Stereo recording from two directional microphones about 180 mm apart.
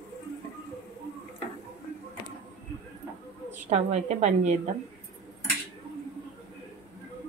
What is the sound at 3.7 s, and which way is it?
Speech, 40° right (ahead or behind).